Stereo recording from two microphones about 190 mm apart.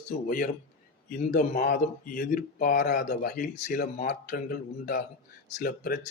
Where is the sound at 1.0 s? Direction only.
45° left (ahead or behind).